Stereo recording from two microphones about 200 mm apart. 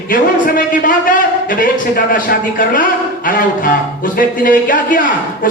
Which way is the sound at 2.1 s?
45° left (ahead or behind).